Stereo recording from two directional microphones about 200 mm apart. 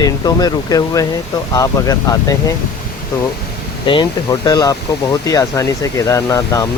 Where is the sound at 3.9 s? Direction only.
20° left (ahead or behind).